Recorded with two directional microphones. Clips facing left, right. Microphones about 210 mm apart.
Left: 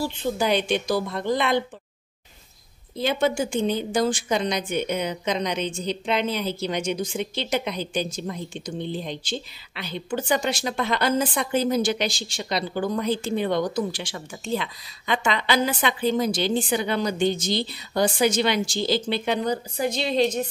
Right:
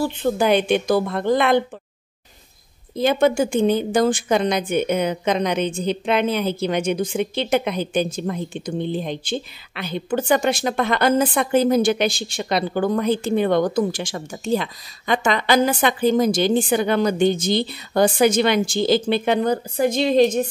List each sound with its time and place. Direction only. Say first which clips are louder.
0.0 s a woman's voice: right 5 dB; 55° right (ahead or behind)
3.0 s a woman's voice: right 6 dB; 50° right (ahead or behind)